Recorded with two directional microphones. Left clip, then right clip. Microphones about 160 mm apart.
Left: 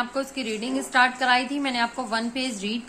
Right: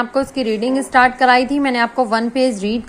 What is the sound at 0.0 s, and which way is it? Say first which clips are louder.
A woman's voice: right 10 dB; 35° right (ahead or behind).